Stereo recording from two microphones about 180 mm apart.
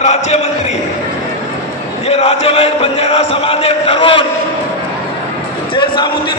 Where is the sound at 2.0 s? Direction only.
35° left (ahead or behind).